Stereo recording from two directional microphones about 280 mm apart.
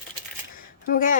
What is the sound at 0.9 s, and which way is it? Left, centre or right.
Speech, left.